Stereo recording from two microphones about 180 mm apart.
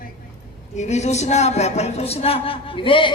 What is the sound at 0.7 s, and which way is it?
Speech, 40° left (ahead or behind).